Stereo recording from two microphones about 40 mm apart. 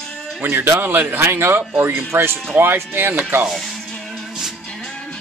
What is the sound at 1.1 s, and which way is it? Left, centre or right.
Speech, right.